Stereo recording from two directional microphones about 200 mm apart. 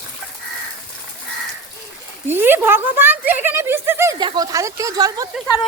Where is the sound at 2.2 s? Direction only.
10° right (ahead or behind).